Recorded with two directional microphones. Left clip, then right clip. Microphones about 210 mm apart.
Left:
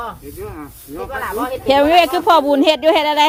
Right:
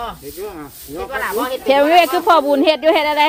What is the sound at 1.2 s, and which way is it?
A child's voice, 10° left (ahead or behind).